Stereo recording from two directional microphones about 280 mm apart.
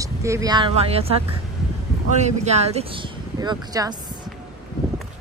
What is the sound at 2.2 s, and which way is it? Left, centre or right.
A woman's voice, right.